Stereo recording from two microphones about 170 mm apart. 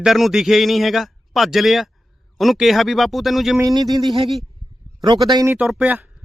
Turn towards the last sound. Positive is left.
turn(degrees=-10)  # may be behind; listen again after turning